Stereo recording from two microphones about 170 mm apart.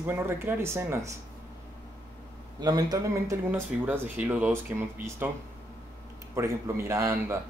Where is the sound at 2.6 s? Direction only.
25° right (ahead or behind).